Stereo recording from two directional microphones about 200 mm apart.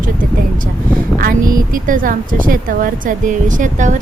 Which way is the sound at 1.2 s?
45° right (ahead or behind).